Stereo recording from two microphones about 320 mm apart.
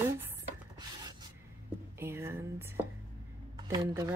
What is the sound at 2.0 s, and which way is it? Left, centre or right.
A woman's voice, centre.